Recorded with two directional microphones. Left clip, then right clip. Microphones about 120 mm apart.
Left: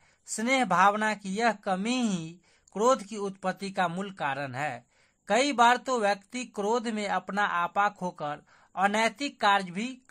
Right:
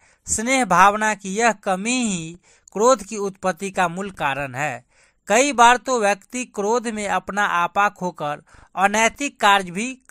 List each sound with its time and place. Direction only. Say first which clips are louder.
0.4 s a man's voice: right 8 dB; 35° right (ahead or behind)